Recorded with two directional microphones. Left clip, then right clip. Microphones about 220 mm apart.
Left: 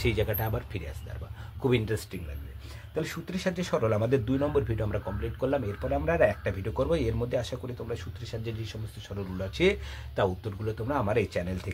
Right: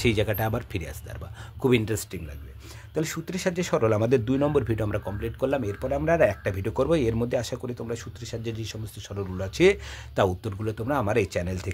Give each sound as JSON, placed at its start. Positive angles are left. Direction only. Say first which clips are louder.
{"t": 0.0, "sound": "speech", "louder": "right 4 dB", "side_deg": -45}